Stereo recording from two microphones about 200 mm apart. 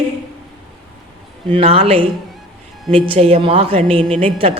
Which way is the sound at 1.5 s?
30° right (ahead or behind).